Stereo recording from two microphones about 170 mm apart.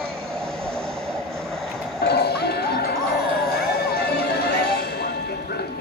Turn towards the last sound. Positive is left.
turn(degrees=70)  # may be behind; listen again after turning